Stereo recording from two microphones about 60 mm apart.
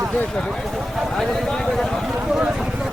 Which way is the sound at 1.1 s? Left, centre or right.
Centre.